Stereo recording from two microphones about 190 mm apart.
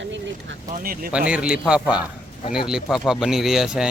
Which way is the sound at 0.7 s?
50° right (ahead or behind).